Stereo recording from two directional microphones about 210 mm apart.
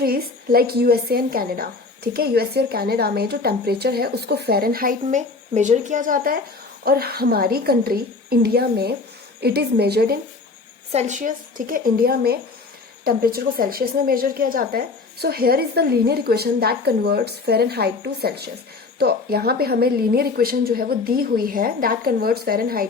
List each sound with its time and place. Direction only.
0.0 s a woman's voice: 45° right (ahead or behind)
10.9 s a woman's voice: 35° right (ahead or behind)